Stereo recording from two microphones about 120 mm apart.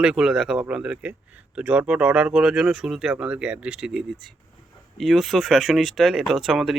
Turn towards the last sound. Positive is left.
turn(degrees=0)  # may be behind; listen again after turning